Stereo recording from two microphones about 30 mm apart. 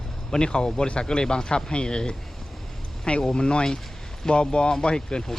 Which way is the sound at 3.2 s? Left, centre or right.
Left.